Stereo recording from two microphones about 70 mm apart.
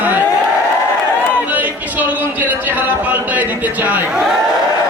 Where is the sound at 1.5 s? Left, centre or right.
Right.